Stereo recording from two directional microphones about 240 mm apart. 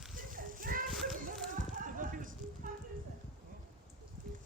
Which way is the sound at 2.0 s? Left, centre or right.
Right.